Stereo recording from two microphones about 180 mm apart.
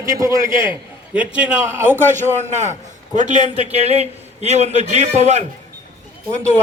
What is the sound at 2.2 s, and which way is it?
A man's voice, 40° right (ahead or behind).